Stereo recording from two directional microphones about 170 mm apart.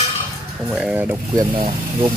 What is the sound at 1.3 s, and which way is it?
Speech, 30° right (ahead or behind).